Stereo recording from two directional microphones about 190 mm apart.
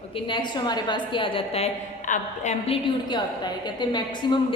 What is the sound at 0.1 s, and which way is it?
A woman's voice, 25° left (ahead or behind).